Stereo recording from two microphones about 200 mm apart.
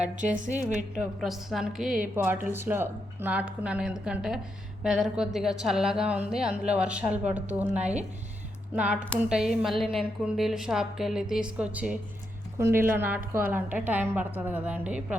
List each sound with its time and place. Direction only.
0.0 s a woman's voice: 40° right (ahead or behind)
0.9 s a woman's voice: centre (ahead or behind)
7.8 s a woman's voice: 35° right (ahead or behind)
8.7 s a woman's voice: 5° right (ahead or behind)